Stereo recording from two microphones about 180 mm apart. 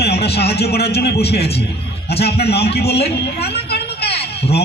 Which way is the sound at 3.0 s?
35° left (ahead or behind).